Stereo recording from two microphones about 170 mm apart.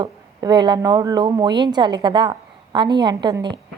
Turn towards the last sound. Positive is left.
turn(degrees=-25)  # may be behind; listen again after turning